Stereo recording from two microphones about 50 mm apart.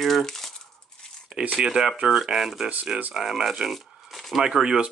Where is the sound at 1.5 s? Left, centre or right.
Centre.